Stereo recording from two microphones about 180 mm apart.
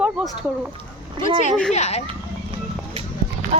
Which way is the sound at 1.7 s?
40° left (ahead or behind).